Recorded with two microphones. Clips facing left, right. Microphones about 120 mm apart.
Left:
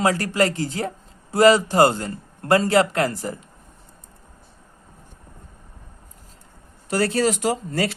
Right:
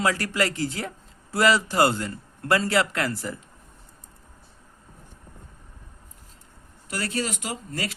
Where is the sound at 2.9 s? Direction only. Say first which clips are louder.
Left 5 dB; 40° left (ahead or behind).